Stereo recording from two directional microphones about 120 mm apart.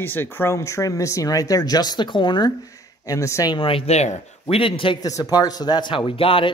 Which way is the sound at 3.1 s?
25° left (ahead or behind).